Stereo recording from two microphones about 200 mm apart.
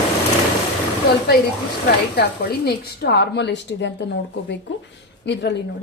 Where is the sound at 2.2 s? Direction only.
55° left (ahead or behind).